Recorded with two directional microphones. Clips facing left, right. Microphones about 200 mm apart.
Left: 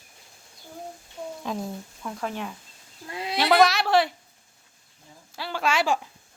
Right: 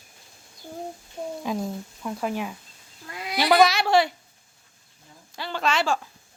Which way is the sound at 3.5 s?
Centre (ahead or behind).